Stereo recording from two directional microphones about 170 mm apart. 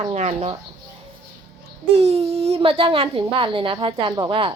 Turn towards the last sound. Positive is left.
turn(degrees=-30)  # may be behind; listen again after turning